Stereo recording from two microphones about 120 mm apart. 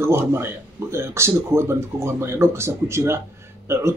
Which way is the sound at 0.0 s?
20° right (ahead or behind).